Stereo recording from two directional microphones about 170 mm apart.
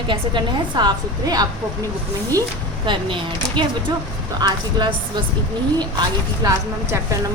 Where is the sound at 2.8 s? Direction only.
30° right (ahead or behind).